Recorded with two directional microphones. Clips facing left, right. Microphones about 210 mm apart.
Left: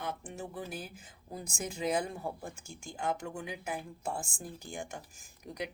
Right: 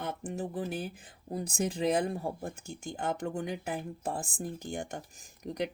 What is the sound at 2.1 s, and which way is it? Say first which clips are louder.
Speech: right 4 dB; 35° right (ahead or behind).